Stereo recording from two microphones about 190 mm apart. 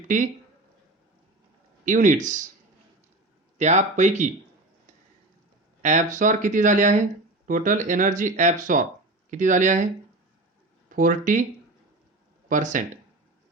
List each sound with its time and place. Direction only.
1.8 s speech: 45° right (ahead or behind)
3.6 s speech: 35° right (ahead or behind)
5.8 s speech: 40° right (ahead or behind)
12.5 s speech: 40° right (ahead or behind)